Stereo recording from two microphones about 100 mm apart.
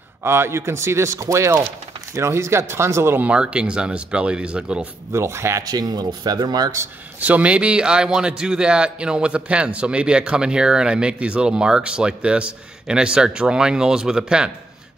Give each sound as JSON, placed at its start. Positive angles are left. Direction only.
{"t": 0.2, "sound": "speech", "side_deg": -25}
{"t": 3.3, "sound": "a man's voice", "side_deg": -10}
{"t": 5.1, "sound": "speech", "side_deg": -25}
{"t": 5.6, "sound": "speech", "side_deg": -40}
{"t": 6.8, "sound": "a man's voice", "side_deg": -15}